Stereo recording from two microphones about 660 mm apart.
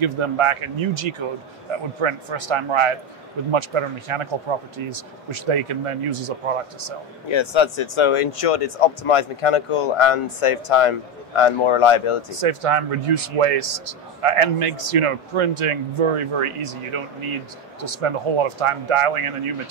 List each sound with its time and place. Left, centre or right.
0.0 s a man's voice: right
7.2 s speech: left
12.3 s a man's voice: right